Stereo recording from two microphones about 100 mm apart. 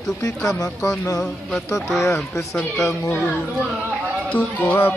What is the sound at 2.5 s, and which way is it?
Speech, 10° left (ahead or behind).